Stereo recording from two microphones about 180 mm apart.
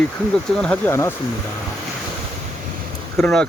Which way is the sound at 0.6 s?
10° left (ahead or behind).